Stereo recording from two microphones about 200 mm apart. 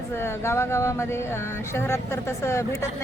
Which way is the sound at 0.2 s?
15° left (ahead or behind).